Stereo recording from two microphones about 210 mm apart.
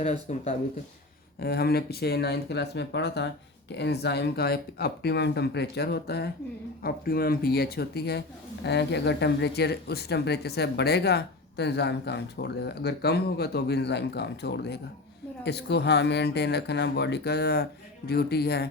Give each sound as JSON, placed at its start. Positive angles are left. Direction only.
{"t": 0.0, "sound": "speech", "side_deg": 30}
{"t": 1.4, "sound": "speech", "side_deg": 50}